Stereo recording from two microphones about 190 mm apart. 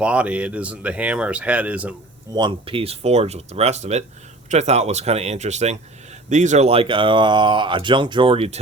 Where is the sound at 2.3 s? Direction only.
25° right (ahead or behind).